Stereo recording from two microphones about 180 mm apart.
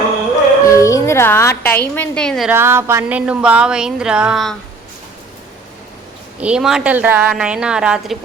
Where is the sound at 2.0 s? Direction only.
5° left (ahead or behind).